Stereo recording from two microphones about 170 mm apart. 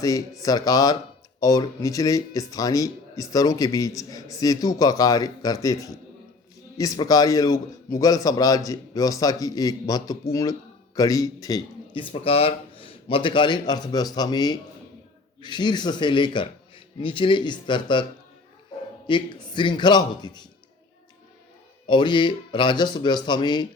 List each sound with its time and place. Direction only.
0.0 s speech: 20° left (ahead or behind)
11.9 s speech: 35° left (ahead or behind)
19.0 s speech: 30° left (ahead or behind)
21.8 s speech: 30° left (ahead or behind)